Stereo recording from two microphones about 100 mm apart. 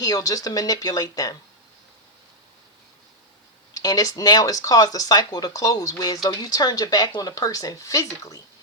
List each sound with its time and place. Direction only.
0.0 s speech: 40° left (ahead or behind)
3.8 s speech: 40° left (ahead or behind)